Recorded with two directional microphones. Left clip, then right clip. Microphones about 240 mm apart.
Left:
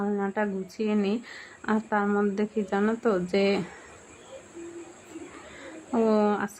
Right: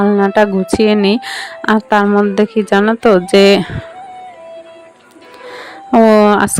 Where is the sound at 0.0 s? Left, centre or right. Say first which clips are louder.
Right 18 dB; right.